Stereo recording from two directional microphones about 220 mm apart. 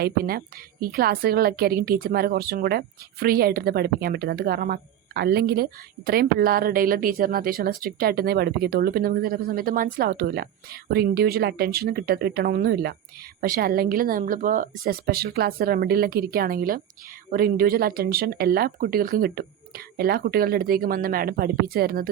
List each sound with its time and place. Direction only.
0.0 s a woman's voice: 45° right (ahead or behind)